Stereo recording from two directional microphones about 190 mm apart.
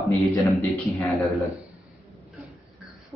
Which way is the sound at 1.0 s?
Centre (ahead or behind).